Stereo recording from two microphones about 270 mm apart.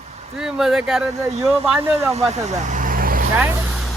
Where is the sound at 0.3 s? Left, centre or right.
Centre.